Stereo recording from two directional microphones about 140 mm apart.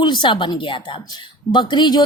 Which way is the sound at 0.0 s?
35° left (ahead or behind).